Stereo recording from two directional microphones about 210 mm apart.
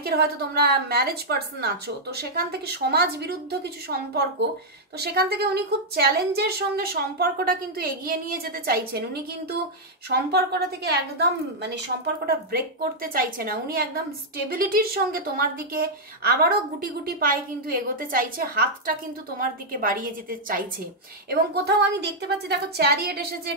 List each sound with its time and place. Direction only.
0.0 s a woman's voice: 50° right (ahead or behind)